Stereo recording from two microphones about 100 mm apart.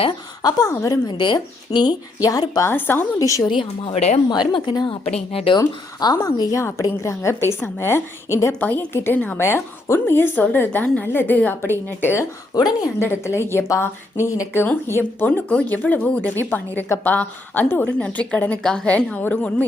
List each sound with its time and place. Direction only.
0.4 s speech: 35° left (ahead or behind)
1.0 s speech: 45° left (ahead or behind)
2.2 s speech: 35° left (ahead or behind)
2.6 s a woman's voice: 20° left (ahead or behind)
3.2 s speech: 35° left (ahead or behind)
3.5 s speech: 55° left (ahead or behind)
5.3 s speech: 75° left (ahead or behind)
5.5 s speech: 45° left (ahead or behind)
6.6 s a woman's voice: 30° left (ahead or behind)
8.6 s a woman's voice: 15° left (ahead or behind)